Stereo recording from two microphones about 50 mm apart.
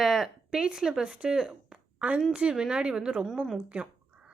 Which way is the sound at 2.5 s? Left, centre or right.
Centre.